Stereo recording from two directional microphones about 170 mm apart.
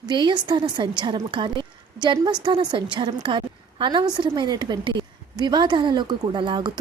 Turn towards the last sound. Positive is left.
turn(degrees=-25)  # may be behind; listen again after turning